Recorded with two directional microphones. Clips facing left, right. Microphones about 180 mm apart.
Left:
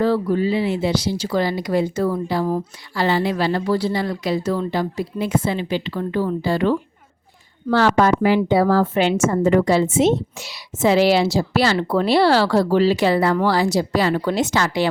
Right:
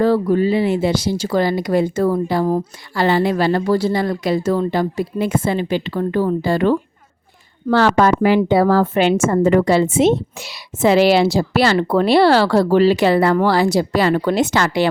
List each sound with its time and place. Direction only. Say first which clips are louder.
0.0 s speech: right 3 dB; 50° right (ahead or behind)
7.7 s a woman's voice: right 2 dB; 65° right (ahead or behind)